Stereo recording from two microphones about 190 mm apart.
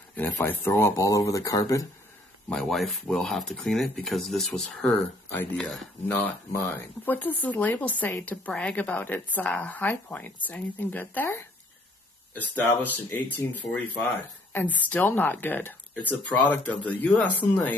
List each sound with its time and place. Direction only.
0.1 s speech: 10° left (ahead or behind)
2.5 s speech: centre (ahead or behind)